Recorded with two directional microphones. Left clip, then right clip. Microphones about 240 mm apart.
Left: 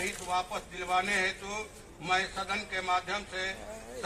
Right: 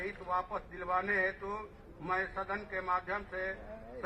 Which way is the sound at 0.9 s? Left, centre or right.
Left.